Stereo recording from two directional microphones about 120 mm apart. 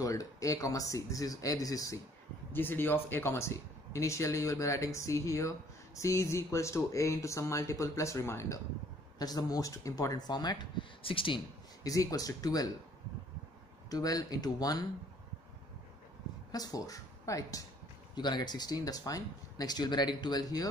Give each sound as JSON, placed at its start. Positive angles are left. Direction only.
{"t": 0.0, "sound": "speech", "side_deg": 30}
{"t": 2.5, "sound": "speech", "side_deg": 15}
{"t": 11.8, "sound": "speech", "side_deg": 30}
{"t": 13.8, "sound": "speech", "side_deg": 30}
{"t": 16.5, "sound": "speech", "side_deg": 30}
{"t": 18.1, "sound": "speech", "side_deg": 40}